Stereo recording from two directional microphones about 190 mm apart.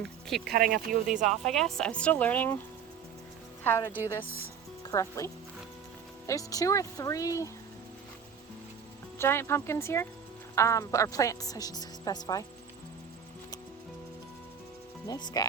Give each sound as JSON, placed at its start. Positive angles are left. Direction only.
{"t": 0.0, "sound": "speech", "side_deg": 0}
{"t": 0.4, "sound": "speech", "side_deg": -50}
{"t": 1.5, "sound": "speech", "side_deg": 0}
{"t": 3.6, "sound": "a woman's voice", "side_deg": 10}
{"t": 9.1, "sound": "speech", "side_deg": 10}
{"t": 15.0, "sound": "speech", "side_deg": 20}